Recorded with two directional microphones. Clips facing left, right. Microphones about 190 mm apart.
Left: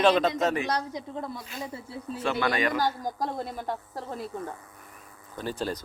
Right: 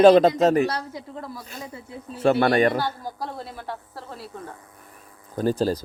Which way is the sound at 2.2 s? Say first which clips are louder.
Right 9 dB; 45° right (ahead or behind).